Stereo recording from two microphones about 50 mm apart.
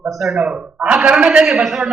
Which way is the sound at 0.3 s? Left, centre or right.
Centre.